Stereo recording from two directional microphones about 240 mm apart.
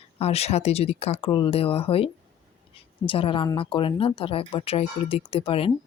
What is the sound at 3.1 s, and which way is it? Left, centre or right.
Speech, left.